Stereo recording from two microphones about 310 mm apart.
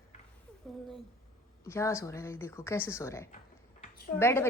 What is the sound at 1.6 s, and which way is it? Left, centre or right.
Speech, centre.